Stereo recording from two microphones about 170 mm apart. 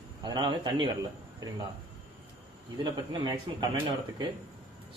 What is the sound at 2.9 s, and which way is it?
Speech, 25° right (ahead or behind).